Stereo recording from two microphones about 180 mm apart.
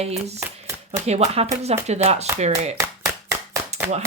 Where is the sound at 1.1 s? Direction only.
35° right (ahead or behind).